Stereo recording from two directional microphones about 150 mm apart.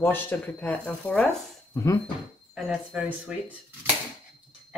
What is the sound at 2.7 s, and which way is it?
Speech, 5° right (ahead or behind).